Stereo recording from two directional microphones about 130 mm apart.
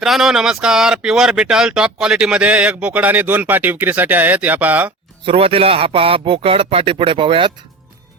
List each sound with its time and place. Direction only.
0.0 s speech: 5° right (ahead or behind)
5.2 s a man's voice: 45° right (ahead or behind)